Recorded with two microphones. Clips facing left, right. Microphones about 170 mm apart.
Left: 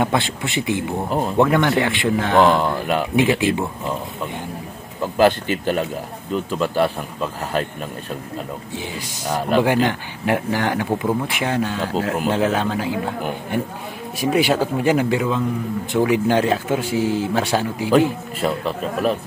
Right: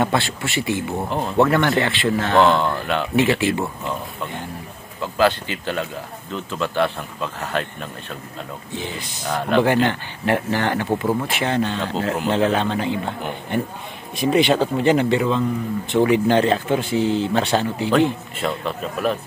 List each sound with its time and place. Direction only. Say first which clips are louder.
0.0 s speech: even; 15° left (ahead or behind)
5.0 s speech: left 3 dB; 15° left (ahead or behind)
6.3 s speech: left 3 dB; 5° left (ahead or behind)
8.7 s speech: even; 10° left (ahead or behind)